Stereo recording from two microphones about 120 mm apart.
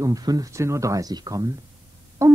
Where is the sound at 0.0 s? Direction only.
30° right (ahead or behind).